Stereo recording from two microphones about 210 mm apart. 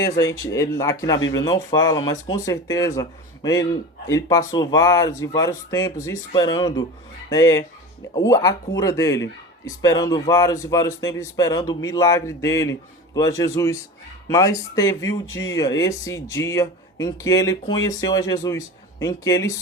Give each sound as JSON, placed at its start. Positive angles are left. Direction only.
{"t": 0.0, "sound": "speech", "side_deg": 15}